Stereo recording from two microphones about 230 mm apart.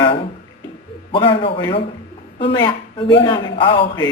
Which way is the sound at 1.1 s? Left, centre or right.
Left.